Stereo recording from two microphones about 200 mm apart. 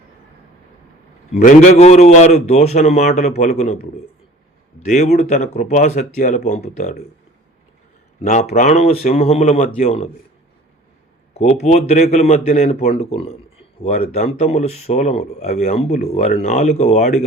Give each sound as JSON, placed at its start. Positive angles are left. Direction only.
{"t": 1.4, "sound": "speech", "side_deg": 40}
{"t": 4.8, "sound": "speech", "side_deg": 35}
{"t": 8.2, "sound": "speech", "side_deg": 35}
{"t": 11.3, "sound": "speech", "side_deg": 35}